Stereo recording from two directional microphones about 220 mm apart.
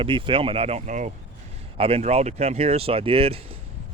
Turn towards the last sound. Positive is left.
turn(degrees=-25)  # may be behind; listen again after turning